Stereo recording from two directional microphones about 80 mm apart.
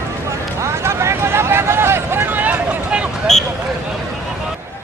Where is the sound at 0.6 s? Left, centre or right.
Right; by 3.0 s centre.